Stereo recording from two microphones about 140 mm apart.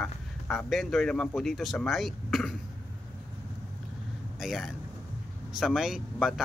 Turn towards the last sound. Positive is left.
turn(degrees=0)  # may be behind; listen again after turning